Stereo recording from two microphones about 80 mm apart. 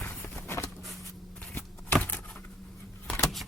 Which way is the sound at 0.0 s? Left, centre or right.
Centre.